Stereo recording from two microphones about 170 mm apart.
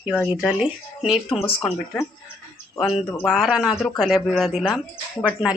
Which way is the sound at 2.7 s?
5° right (ahead or behind).